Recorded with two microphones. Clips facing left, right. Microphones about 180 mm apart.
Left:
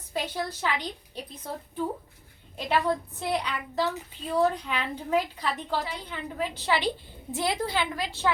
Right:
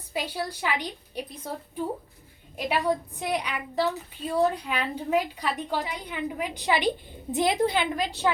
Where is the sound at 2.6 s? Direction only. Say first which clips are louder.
Even; 10° right (ahead or behind).